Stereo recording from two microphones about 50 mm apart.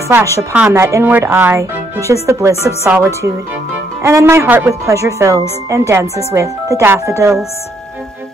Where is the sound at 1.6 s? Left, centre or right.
Right.